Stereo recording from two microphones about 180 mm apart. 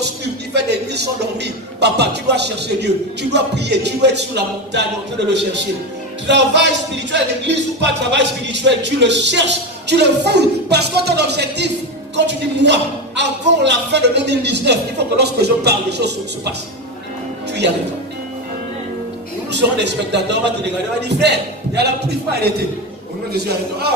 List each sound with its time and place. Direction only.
0.0 s speech: 70° right (ahead or behind)
4.7 s music: 75° right (ahead or behind)
19.5 s music: 75° right (ahead or behind)
23.3 s a man's voice: 60° right (ahead or behind)